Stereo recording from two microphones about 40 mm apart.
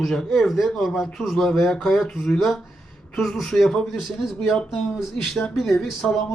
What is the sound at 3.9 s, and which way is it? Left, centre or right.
Speech, centre.